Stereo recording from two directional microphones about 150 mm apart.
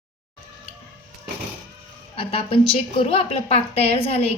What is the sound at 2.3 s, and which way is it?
A woman's voice, 40° left (ahead or behind).